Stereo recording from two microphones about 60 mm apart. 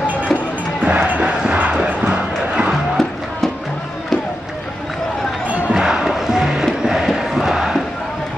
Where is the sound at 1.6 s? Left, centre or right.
Centre.